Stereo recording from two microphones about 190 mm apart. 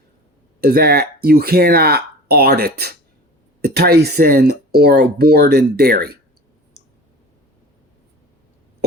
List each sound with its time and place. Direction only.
0.6 s speech: 55° right (ahead or behind)